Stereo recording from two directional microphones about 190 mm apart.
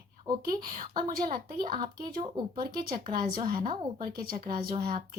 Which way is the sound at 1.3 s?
25° right (ahead or behind).